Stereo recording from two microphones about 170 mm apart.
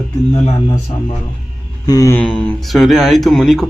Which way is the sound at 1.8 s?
20° left (ahead or behind).